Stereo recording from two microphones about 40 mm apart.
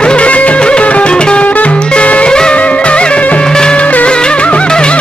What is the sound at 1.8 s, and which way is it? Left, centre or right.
Music, left.